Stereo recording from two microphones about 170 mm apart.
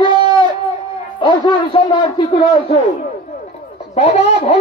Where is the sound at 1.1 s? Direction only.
30° left (ahead or behind).